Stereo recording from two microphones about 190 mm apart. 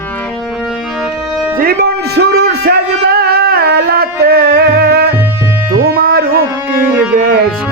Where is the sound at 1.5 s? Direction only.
55° right (ahead or behind).